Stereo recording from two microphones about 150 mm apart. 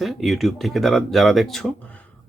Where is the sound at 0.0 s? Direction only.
Centre (ahead or behind).